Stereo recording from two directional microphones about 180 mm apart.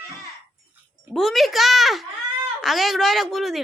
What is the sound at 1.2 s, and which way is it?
A woman's voice, centre (ahead or behind).